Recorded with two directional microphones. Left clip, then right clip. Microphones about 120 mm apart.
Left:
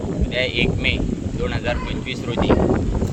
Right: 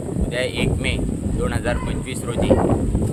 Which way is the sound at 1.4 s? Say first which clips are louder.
Even; 45° right (ahead or behind).